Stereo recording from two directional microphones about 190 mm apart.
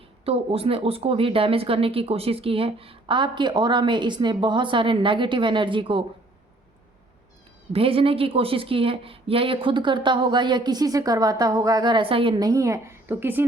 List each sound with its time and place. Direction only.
0.3 s speech: 30° right (ahead or behind)
7.7 s speech: 30° right (ahead or behind); by 13.4 s 10° right (ahead or behind)